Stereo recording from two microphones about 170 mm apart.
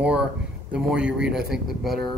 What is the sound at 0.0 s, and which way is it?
Speech, 5° right (ahead or behind).